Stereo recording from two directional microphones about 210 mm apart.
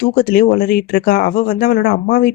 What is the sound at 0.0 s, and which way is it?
Speech, 45° left (ahead or behind).